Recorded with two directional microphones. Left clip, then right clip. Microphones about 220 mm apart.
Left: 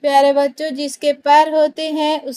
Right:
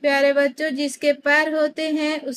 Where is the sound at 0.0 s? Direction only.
15° left (ahead or behind).